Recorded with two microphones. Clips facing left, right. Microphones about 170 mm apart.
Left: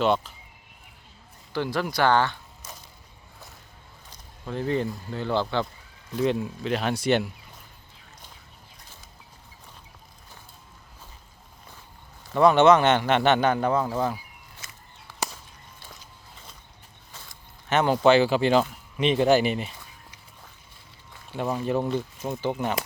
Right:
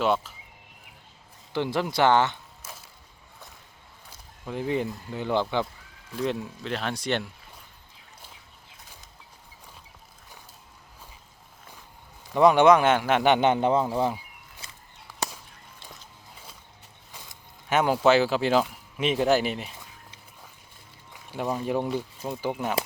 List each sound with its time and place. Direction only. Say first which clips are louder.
0.0 s speech: left 2 dB; 5° right (ahead or behind)
1.5 s speech: right 1 dB; 20° right (ahead or behind)
2.6 s mechanisms: even; 5° right (ahead or behind)
4.4 s speech: left 1 dB; 10° right (ahead or behind)
6.1 s speech: left 4 dB; centre (ahead or behind)
12.3 s speech: even; 15° right (ahead or behind)
13.9 s speech: right 1 dB; 10° right (ahead or behind)
14.6 s a sound: even; 30° right (ahead or behind)
17.1 s speech: even; 15° right (ahead or behind)
21.1 s a sound: left 1 dB; 10° right (ahead or behind)
21.4 s speech: left 1 dB; centre (ahead or behind)